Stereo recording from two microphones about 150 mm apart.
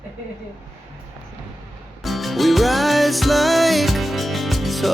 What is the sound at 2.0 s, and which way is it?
Music, centre (ahead or behind).